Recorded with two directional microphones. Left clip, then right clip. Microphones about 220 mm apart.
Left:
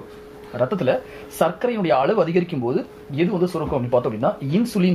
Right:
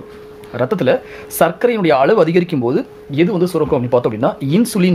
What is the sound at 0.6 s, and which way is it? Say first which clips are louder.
Speech: right 5 dB; 45° right (ahead or behind).